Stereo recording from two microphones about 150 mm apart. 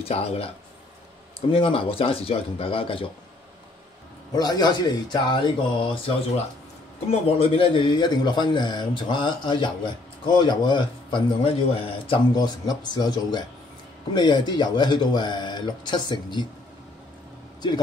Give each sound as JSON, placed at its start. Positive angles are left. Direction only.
{"t": 0.1, "sound": "a man's voice", "side_deg": 40}
{"t": 1.5, "sound": "a man's voice", "side_deg": 35}
{"t": 4.3, "sound": "a man's voice", "side_deg": 25}